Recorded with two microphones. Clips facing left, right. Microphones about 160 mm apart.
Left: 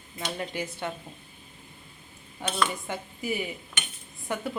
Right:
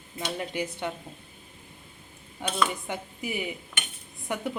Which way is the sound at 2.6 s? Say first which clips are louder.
Right 1 dB; 15° right (ahead or behind).